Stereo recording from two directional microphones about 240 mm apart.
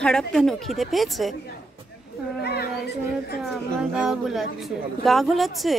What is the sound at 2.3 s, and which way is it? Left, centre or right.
Children playing, left.